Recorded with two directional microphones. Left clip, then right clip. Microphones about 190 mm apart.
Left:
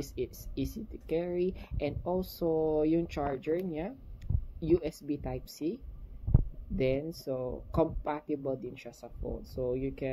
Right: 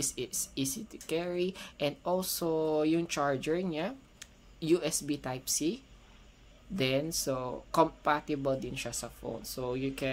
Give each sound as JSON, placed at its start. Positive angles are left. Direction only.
{"t": 0.0, "sound": "speech", "side_deg": -15}
{"t": 6.8, "sound": "speech", "side_deg": -15}